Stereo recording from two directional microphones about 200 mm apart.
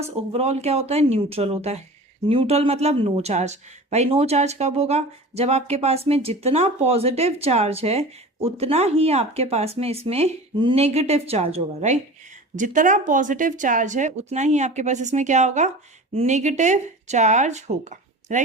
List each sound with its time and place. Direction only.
0.0 s speech: 30° right (ahead or behind)